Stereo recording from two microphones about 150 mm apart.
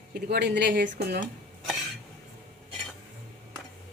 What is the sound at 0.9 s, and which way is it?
Speech, 75° right (ahead or behind).